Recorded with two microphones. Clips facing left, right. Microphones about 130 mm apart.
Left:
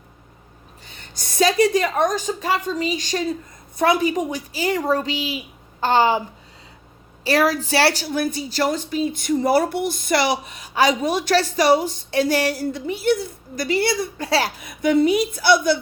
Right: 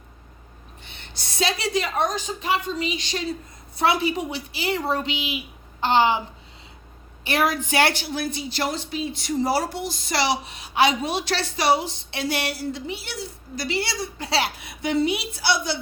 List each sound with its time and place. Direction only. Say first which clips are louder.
0.9 s a woman's voice: left 3 dB; 45° left (ahead or behind)
7.3 s a woman's voice: left 4 dB; 35° left (ahead or behind); by 15.8 s 50° left (ahead or behind)